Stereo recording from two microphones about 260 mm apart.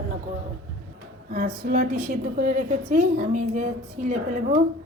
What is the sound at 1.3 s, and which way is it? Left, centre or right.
A woman's voice, right.